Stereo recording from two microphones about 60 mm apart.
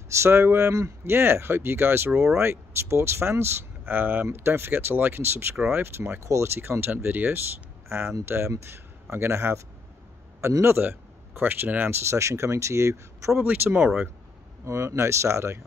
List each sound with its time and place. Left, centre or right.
0.1 s speech: right
8.5 s speech: right
10.8 s speech: right
12.1 s speech: right
13.4 s speech: right
14.6 s speech: right